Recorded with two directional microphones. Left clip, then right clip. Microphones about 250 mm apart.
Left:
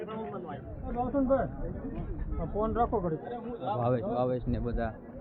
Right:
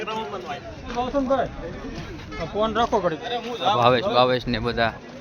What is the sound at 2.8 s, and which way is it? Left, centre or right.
Speech, right.